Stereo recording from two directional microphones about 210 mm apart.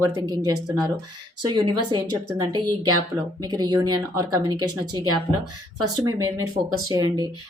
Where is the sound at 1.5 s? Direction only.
20° right (ahead or behind).